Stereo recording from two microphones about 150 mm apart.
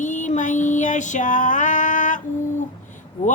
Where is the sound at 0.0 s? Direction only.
55° left (ahead or behind).